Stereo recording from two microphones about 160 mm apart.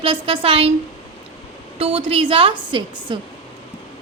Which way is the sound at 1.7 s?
35° right (ahead or behind).